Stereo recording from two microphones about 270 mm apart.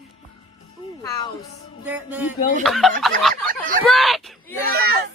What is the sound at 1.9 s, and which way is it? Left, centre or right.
A woman's voice, centre.